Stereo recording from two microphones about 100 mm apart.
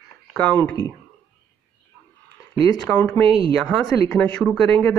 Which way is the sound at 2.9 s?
10° left (ahead or behind).